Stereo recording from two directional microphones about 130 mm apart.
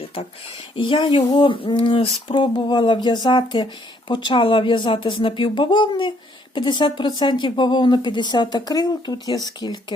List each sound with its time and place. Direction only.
0.8 s speech: 40° left (ahead or behind)